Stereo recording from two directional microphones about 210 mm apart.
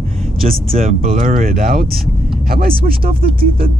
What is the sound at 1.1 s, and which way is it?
Speech, 40° right (ahead or behind).